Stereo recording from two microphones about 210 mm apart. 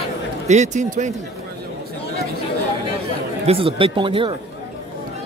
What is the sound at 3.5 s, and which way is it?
Speech, 25° right (ahead or behind).